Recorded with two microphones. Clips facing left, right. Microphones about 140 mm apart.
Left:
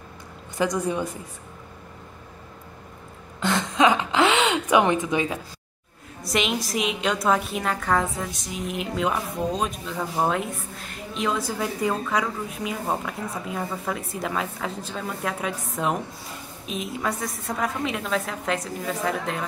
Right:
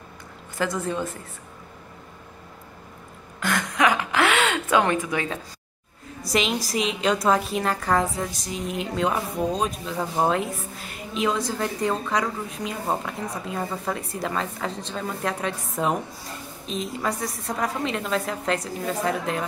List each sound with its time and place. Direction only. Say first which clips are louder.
0.6 s a woman's voice: left 2 dB; 15° left (ahead or behind)
3.3 s gasp: left 2 dB; 25° left (ahead or behind)
6.2 s a woman's voice: right 1 dB; centre (ahead or behind)